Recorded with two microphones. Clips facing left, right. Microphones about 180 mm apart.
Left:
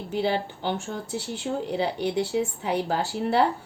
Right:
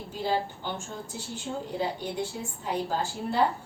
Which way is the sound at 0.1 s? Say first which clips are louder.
Left 3 dB; 70° left (ahead or behind).